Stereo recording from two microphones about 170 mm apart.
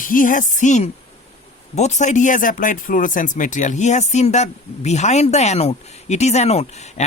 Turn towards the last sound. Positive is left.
turn(degrees=40)  # may be behind; listen again after turning